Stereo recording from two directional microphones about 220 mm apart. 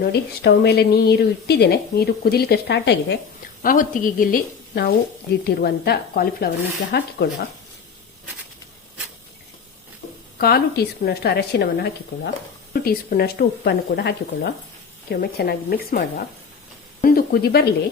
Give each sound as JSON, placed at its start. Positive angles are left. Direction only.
{"t": 0.0, "sound": "speech", "side_deg": 50}
{"t": 3.6, "sound": "a woman's voice", "side_deg": 40}
{"t": 10.3, "sound": "speech", "side_deg": 45}